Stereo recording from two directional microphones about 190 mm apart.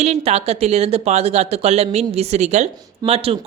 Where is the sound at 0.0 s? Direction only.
35° right (ahead or behind).